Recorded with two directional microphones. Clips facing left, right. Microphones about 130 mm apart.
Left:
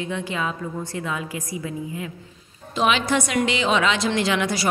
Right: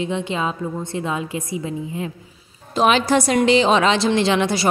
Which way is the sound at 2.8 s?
40° right (ahead or behind).